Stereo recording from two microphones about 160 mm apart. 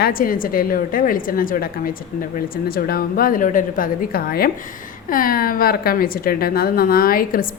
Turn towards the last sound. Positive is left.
turn(degrees=65)  # may be behind; listen again after turning